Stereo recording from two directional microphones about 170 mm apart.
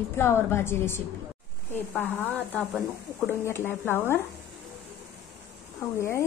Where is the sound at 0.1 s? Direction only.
15° left (ahead or behind).